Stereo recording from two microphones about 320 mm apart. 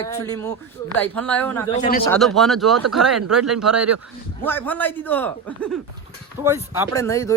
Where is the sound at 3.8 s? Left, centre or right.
Right.